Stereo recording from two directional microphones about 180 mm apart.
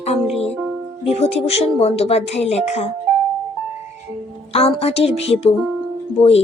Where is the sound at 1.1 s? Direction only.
35° left (ahead or behind).